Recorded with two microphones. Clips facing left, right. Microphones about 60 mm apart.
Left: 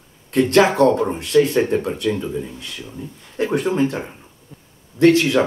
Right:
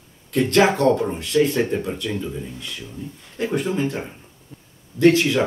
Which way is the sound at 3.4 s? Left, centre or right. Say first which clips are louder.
Left 3 dB; left.